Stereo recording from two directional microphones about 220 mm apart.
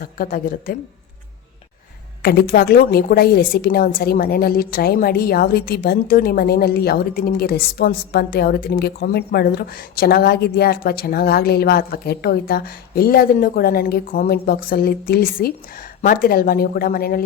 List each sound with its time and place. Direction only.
0.0 s a woman's voice: 40° left (ahead or behind)
2.2 s a woman's voice: 45° left (ahead or behind)